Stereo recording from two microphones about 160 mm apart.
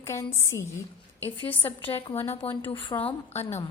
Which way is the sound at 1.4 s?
35° left (ahead or behind).